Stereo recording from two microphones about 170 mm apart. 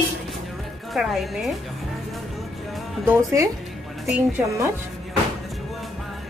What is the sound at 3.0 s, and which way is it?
Speech, 15° right (ahead or behind).